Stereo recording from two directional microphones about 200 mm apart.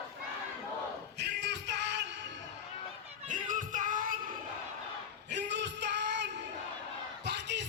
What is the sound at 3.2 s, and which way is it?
Music, 40° right (ahead or behind).